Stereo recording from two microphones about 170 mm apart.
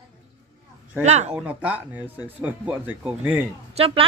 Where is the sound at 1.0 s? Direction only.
40° right (ahead or behind).